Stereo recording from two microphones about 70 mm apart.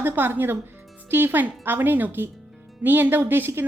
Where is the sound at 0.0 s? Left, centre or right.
Right.